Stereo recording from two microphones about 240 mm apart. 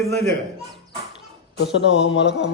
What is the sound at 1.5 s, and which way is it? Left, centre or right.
Speech, left.